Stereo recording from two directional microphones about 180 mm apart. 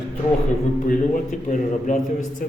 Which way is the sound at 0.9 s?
45° left (ahead or behind).